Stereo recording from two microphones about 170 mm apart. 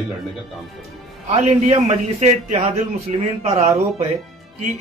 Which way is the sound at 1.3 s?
40° right (ahead or behind).